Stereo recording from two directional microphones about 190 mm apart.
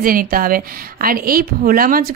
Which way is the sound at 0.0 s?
50° right (ahead or behind).